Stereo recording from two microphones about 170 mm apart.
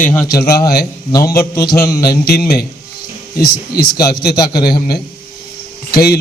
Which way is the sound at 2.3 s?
60° left (ahead or behind).